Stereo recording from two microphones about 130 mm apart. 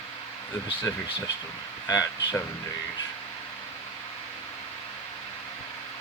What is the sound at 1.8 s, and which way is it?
Speech, 30° left (ahead or behind).